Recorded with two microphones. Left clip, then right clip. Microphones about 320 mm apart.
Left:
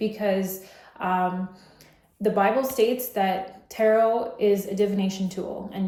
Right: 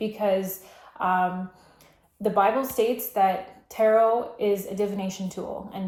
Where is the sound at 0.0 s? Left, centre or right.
Centre.